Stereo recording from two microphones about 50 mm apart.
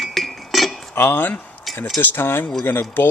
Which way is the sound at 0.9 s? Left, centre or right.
Left.